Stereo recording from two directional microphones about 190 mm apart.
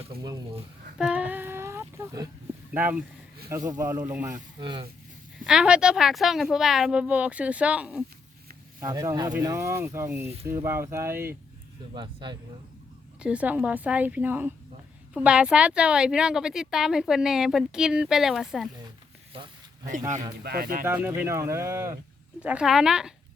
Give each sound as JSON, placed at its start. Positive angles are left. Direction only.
{"t": 0.2, "sound": "speech", "side_deg": -20}
{"t": 0.9, "sound": "child singing", "side_deg": -5}
{"t": 2.7, "sound": "speech", "side_deg": -10}
{"t": 4.6, "sound": "speech", "side_deg": -25}
{"t": 5.5, "sound": "speech", "side_deg": -5}
{"t": 8.8, "sound": "speech", "side_deg": -20}
{"t": 11.9, "sound": "speech", "side_deg": -25}
{"t": 13.1, "sound": "speech", "side_deg": -5}
{"t": 19.3, "sound": "speech", "side_deg": -30}
{"t": 20.4, "sound": "speech", "side_deg": -50}
{"t": 20.8, "sound": "speech", "side_deg": -10}
{"t": 22.4, "sound": "speech", "side_deg": -5}